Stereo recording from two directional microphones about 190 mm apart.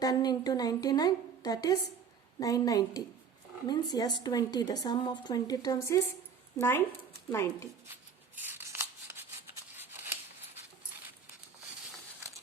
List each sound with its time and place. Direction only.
0.0 s a woman's voice: 20° left (ahead or behind)
8.4 s shuffling cards: 10° right (ahead or behind)
9.7 s scissors: 10° right (ahead or behind)